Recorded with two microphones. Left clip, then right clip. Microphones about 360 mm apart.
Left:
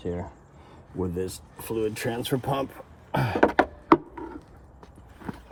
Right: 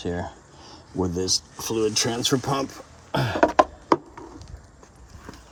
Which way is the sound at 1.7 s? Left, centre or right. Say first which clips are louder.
Right 5 dB; right.